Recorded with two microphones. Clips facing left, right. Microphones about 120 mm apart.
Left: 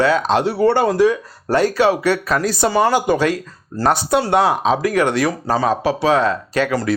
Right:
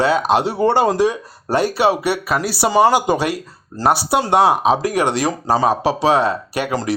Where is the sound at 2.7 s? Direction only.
20° right (ahead or behind).